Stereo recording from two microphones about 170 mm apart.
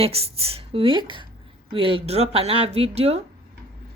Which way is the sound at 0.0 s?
35° right (ahead or behind).